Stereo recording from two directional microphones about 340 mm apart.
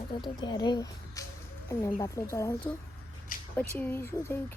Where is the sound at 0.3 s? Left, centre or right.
Centre.